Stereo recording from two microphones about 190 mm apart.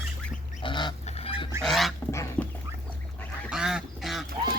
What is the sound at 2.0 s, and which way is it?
Goose, 15° left (ahead or behind).